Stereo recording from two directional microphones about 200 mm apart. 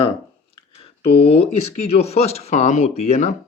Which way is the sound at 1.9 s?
30° left (ahead or behind).